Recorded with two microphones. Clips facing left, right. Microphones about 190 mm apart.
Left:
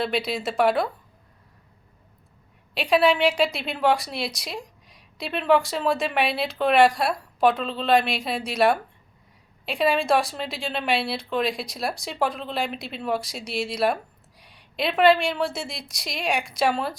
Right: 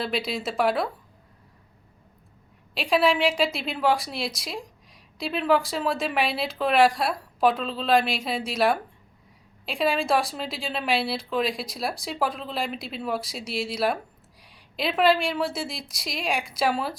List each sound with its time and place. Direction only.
0.0 s a woman's voice: centre (ahead or behind)
2.7 s a woman's voice: centre (ahead or behind)